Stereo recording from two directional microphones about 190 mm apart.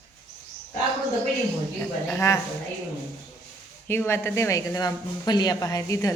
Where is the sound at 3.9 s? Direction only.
15° left (ahead or behind).